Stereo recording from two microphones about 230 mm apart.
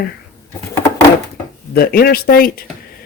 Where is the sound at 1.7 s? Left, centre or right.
Left.